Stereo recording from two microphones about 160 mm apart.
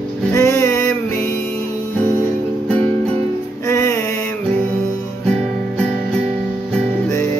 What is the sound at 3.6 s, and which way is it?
Music, 20° left (ahead or behind).